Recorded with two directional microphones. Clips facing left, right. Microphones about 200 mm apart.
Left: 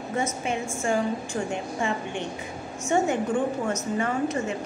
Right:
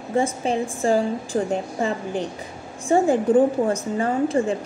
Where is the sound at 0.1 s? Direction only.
30° right (ahead or behind).